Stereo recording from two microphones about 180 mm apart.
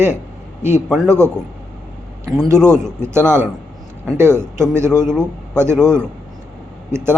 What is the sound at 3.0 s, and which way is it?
Speech, 15° right (ahead or behind).